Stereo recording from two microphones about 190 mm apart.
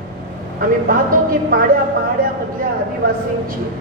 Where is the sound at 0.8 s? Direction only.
50° right (ahead or behind).